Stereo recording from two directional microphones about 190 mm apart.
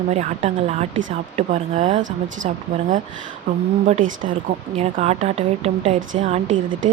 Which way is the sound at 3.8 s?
35° right (ahead or behind).